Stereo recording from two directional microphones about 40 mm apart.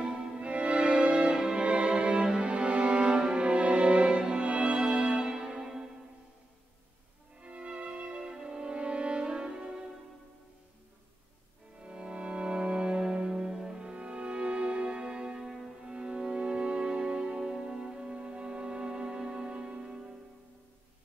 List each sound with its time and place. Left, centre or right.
0.4 s music: right; by 5.9 s centre
7.4 s music: right
8.2 s music: centre
11.8 s music: right